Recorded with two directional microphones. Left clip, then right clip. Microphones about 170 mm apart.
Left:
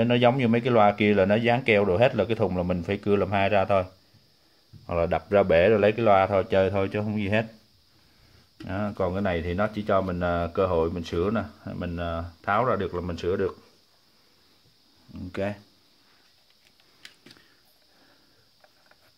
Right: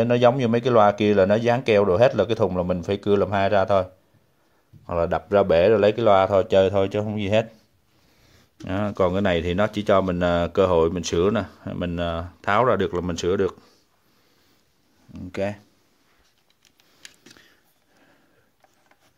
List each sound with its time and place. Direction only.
0.0 s speech: 25° right (ahead or behind)
4.8 s speech: 15° right (ahead or behind)
8.6 s speech: 50° right (ahead or behind)
15.1 s speech: 30° right (ahead or behind)